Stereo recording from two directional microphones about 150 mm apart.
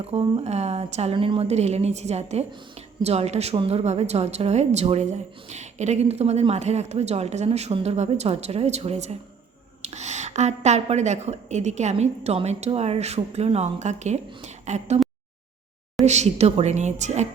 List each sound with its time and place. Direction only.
0.0 s a woman's voice: 40° right (ahead or behind)
16.0 s a woman's voice: 50° right (ahead or behind)